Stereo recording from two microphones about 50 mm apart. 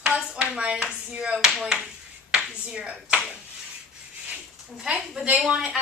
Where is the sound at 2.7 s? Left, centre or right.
Right.